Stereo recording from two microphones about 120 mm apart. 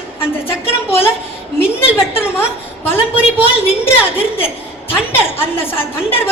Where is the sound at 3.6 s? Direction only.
20° left (ahead or behind).